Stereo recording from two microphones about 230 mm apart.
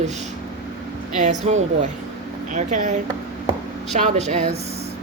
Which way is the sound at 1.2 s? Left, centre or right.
Right.